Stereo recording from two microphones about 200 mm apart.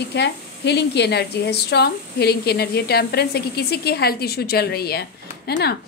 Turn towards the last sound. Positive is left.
turn(degrees=55)  # may be behind; listen again after turning